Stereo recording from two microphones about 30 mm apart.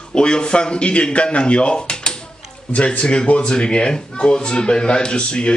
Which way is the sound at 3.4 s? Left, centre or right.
Left.